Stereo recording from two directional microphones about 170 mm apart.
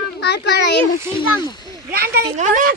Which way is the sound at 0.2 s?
80° left.